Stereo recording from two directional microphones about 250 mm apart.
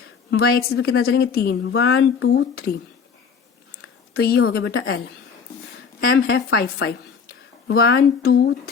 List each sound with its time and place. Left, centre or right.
0.3 s speech: left
1.9 s speech: left
4.2 s speech: left
6.1 s speech: left